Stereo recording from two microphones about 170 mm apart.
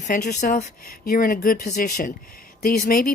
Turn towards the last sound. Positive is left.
turn(degrees=60)  # may be behind; listen again after turning